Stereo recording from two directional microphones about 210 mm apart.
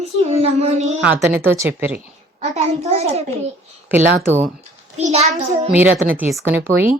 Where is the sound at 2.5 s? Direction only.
30° right (ahead or behind).